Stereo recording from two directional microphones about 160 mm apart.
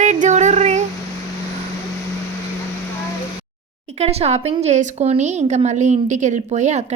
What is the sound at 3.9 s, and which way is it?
Speech, 40° right (ahead or behind).